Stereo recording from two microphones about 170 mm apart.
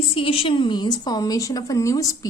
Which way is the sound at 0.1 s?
35° left (ahead or behind).